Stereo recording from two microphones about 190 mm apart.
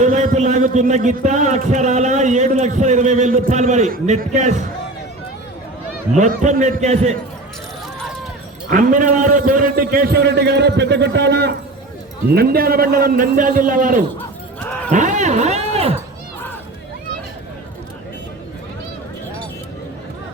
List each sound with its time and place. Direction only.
0.0 s a man's voice: 40° right (ahead or behind)
6.1 s a man's voice: 40° right (ahead or behind)
8.7 s a man's voice: 45° right (ahead or behind)